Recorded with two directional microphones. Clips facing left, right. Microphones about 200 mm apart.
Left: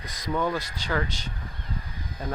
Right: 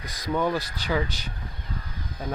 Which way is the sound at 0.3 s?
15° right (ahead or behind).